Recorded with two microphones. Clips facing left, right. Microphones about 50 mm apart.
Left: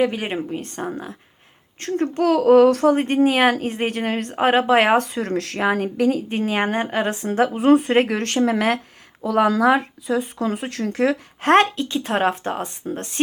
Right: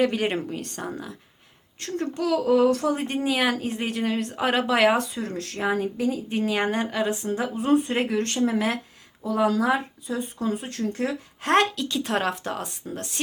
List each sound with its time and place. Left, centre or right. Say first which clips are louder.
0.0 s a woman's voice: left 2 dB; centre
0.5 s speech: left 5 dB; left
1.8 s a woman's voice: left 7 dB; left
5.0 s speech: left 7 dB; left
6.2 s speech: left 3 dB; left
7.1 s speech: left 6 dB; left
7.9 s speech: left 6 dB; left
9.3 s speech: left 5 dB; left
11.4 s speech: left 5 dB; left